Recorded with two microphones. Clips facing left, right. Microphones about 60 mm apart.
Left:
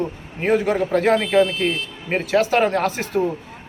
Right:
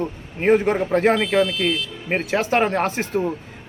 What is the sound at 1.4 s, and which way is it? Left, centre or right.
Speech, left.